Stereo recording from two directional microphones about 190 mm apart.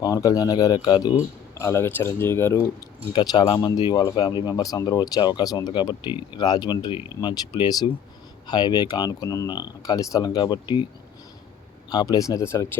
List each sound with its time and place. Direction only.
0.0 s speech: 20° left (ahead or behind)
3.1 s speech: 25° left (ahead or behind)
11.9 s speech: 20° left (ahead or behind)